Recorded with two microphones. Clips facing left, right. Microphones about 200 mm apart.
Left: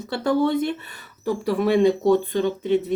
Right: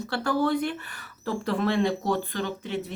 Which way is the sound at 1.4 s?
10° left (ahead or behind).